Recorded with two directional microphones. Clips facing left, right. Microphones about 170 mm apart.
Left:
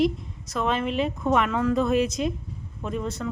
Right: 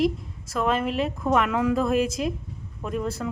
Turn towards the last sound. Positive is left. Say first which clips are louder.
# right 1 dB
turn(degrees=-5)  # may be behind; listen again after turning